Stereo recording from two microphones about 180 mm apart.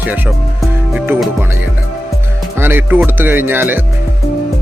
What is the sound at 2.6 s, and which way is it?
Speech, 10° right (ahead or behind).